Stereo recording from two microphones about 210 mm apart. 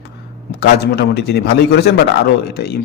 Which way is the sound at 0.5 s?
50° left (ahead or behind).